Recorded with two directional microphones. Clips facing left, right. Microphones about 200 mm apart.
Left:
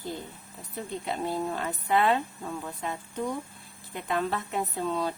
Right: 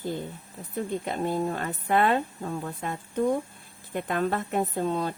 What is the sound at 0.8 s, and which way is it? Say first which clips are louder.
Speech: right 4 dB; 50° right (ahead or behind).